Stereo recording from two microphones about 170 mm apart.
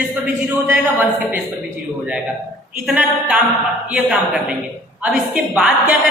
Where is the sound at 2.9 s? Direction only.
5° right (ahead or behind).